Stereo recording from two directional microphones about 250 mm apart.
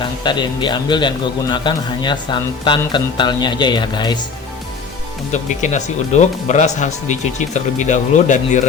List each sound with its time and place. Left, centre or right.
0.2 s a man's voice: centre
5.3 s speech: left